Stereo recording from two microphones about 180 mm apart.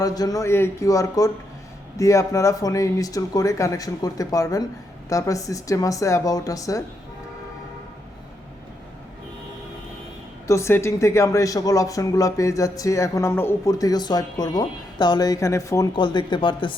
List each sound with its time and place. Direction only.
0.0 s speech: 20° left (ahead or behind)
10.4 s speech: 15° left (ahead or behind)